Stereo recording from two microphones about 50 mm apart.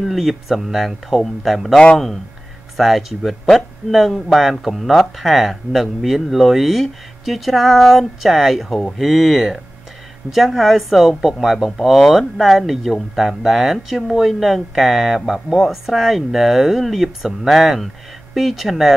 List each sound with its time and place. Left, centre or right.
0.0 s speech: centre
2.8 s speech: centre